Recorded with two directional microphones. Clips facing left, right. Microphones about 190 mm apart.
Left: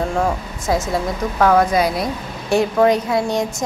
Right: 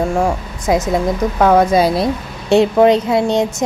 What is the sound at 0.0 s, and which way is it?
A woman's voice, 10° right (ahead or behind).